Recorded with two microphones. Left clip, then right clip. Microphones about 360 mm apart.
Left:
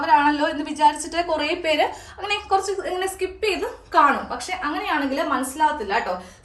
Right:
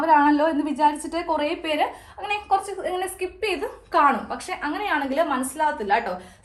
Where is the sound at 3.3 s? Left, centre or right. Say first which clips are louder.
Even; centre.